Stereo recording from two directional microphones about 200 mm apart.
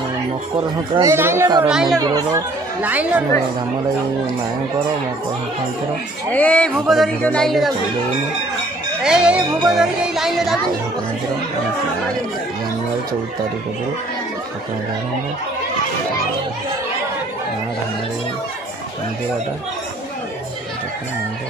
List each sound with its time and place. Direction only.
0.9 s speech: 15° right (ahead or behind)
2.0 s speech: 20° right (ahead or behind)
2.8 s speech: 10° right (ahead or behind)
6.3 s speech: 5° left (ahead or behind)
9.0 s speech: 5° right (ahead or behind)